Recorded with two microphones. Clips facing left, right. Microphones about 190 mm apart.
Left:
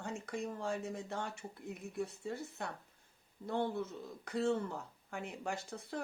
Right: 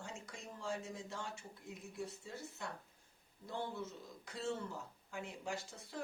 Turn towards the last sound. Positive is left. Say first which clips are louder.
# left 4 dB
turn(degrees=60)  # may be behind; listen again after turning